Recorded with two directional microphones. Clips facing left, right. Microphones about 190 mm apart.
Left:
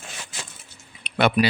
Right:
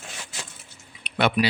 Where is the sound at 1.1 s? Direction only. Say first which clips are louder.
Left 2 dB; 50° left (ahead or behind).